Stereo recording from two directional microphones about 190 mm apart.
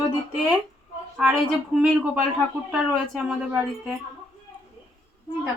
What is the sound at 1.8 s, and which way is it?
A woman's voice, 5° right (ahead or behind).